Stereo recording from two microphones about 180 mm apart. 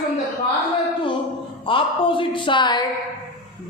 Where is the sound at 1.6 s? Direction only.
30° left (ahead or behind).